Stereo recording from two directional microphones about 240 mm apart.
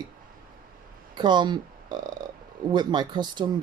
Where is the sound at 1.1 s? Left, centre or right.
Centre.